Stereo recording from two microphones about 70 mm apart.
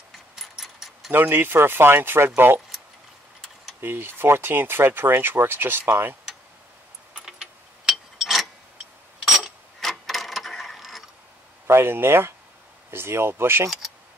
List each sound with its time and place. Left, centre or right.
0.4 s a sound: centre
1.1 s speech: right
3.8 s speech: right
7.2 s keys jangling: centre
7.9 s a sound: centre
9.2 s mechanisms: centre
11.6 s speech: right